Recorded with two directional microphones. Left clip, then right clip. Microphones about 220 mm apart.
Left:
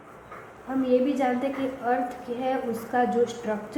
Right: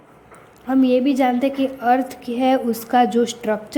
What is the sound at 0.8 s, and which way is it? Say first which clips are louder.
A woman's voice: right 6 dB; 45° right (ahead or behind).